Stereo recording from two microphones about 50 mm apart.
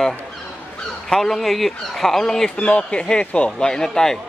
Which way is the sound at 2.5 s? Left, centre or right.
Left.